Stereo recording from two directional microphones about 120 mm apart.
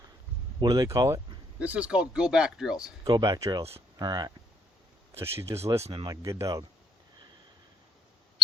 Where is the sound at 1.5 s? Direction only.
10° right (ahead or behind).